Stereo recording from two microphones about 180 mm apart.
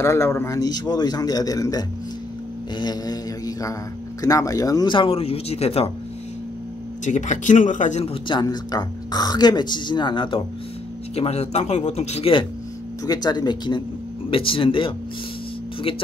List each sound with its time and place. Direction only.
0.0 s speech: 15° left (ahead or behind)
2.8 s mantra: 20° left (ahead or behind)
4.2 s speech: 20° left (ahead or behind); by 5.9 s 35° left (ahead or behind)
7.1 s speech: 40° left (ahead or behind)